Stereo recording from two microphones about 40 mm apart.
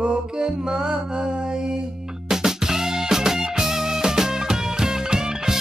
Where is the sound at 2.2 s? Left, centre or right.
Centre.